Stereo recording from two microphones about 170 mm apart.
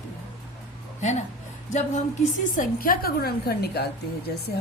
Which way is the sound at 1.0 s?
45° left (ahead or behind).